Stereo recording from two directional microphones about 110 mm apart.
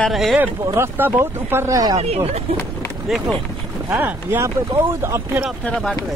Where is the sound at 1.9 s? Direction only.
75° right (ahead or behind).